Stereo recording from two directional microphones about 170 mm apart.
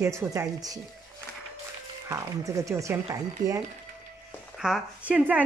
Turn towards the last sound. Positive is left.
turn(degrees=-10)  # may be behind; listen again after turning